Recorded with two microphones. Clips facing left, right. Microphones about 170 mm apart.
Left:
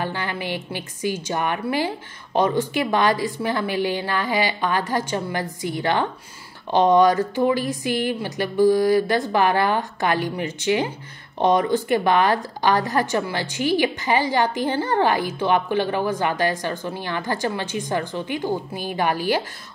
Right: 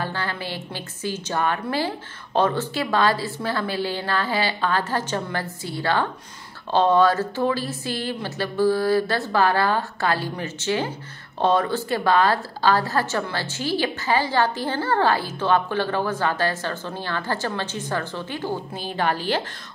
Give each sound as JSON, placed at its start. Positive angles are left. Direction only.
{"t": 0.0, "sound": "a woman's voice", "side_deg": 15}